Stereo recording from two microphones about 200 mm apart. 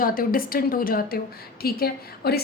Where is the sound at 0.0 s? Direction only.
45° left (ahead or behind).